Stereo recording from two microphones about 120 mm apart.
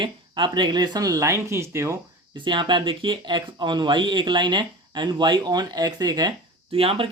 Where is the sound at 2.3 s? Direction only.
40° right (ahead or behind).